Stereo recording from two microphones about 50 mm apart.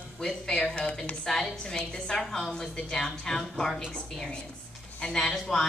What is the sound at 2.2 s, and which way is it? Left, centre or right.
Speech, centre.